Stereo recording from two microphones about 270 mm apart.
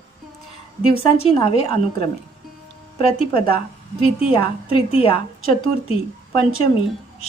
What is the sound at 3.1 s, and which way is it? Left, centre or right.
A woman's voice, left.